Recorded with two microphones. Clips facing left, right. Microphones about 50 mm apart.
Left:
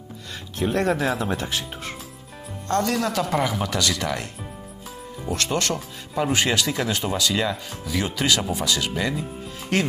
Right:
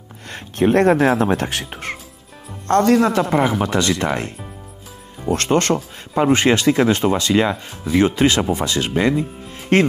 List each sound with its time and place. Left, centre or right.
0.3 s speech: right
2.7 s speech: right